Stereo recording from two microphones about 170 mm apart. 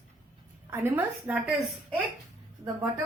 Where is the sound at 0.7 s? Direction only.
10° right (ahead or behind).